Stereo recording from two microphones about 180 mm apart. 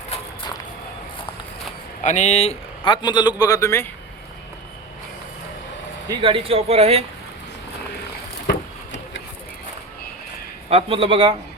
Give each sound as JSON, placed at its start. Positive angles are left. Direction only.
{"t": 2.0, "sound": "a man's voice", "side_deg": 40}
{"t": 6.1, "sound": "speech", "side_deg": -30}
{"t": 8.4, "sound": "a sound", "side_deg": 80}
{"t": 10.7, "sound": "a man's voice", "side_deg": -30}